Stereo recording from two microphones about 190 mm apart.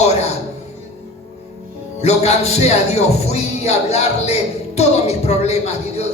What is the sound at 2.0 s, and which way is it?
Speech, 35° left (ahead or behind).